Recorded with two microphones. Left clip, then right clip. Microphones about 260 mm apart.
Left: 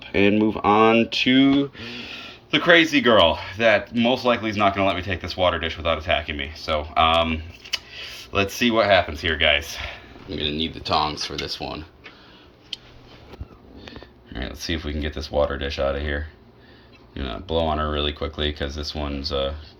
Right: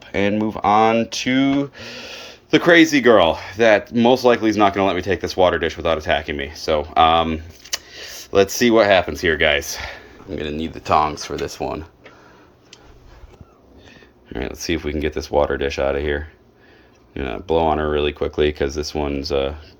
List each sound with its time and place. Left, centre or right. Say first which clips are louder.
0.5 s speech: right 4 dB; right
1.3 s speech: even; right
1.7 s speech: right 1 dB; right
10.2 s speech: even; centre
10.8 s speech: right 6 dB; right
14.3 s speech: right 5 dB; right